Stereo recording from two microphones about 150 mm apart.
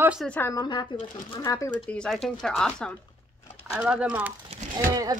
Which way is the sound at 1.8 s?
5° left (ahead or behind).